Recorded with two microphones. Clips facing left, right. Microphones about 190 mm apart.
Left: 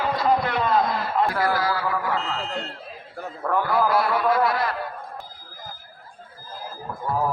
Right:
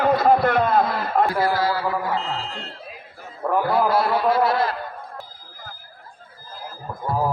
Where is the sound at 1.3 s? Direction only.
30° right (ahead or behind).